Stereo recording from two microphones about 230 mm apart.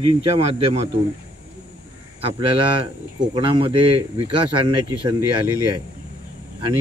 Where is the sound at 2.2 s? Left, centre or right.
Right.